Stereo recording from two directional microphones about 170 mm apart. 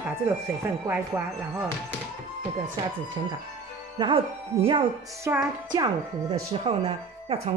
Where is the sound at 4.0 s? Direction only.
30° right (ahead or behind).